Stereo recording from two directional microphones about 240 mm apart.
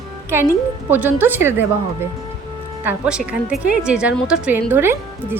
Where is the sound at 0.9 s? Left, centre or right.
Centre.